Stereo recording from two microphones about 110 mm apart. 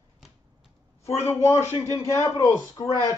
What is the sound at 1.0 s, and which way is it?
A man's voice, 25° left (ahead or behind).